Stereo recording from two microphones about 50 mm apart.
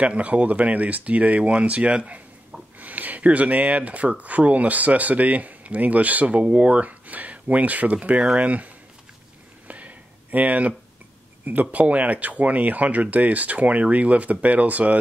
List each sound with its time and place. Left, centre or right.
0.0 s speech: right
9.7 s a sound: right
11.4 s speech: right